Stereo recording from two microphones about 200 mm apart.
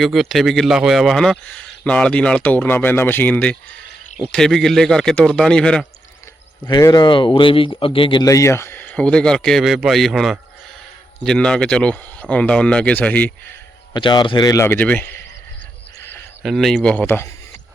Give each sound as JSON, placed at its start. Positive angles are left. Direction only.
{"t": 0.0, "sound": "speech", "side_deg": 0}
{"t": 6.7, "sound": "speech", "side_deg": 20}
{"t": 13.9, "sound": "speech", "side_deg": 20}
{"t": 16.4, "sound": "speech", "side_deg": 0}